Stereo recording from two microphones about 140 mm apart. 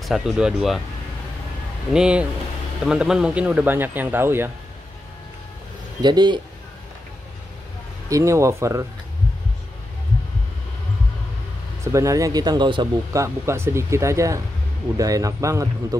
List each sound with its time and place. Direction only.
0.0 s speech: centre (ahead or behind)
2.0 s speech: 5° right (ahead or behind)
6.0 s a man's voice: 30° right (ahead or behind)
8.1 s speech: 20° right (ahead or behind)
11.8 s speech: 20° right (ahead or behind)
13.1 s speech: 20° right (ahead or behind)